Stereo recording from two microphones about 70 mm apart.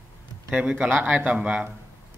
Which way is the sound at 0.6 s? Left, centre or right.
Centre.